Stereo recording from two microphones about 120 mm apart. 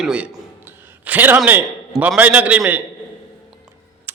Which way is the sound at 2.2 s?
10° right (ahead or behind).